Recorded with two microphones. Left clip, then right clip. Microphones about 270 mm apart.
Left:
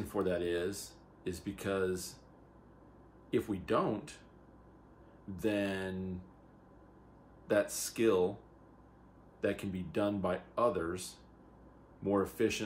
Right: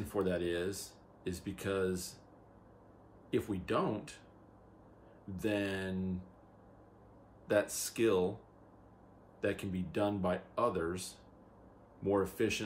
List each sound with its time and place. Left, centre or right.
0.1 s speech: centre
3.3 s speech: centre
5.3 s speech: centre
7.4 s speech: centre
9.4 s speech: centre